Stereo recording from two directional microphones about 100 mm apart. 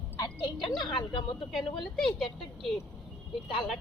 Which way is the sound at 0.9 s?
55° left (ahead or behind).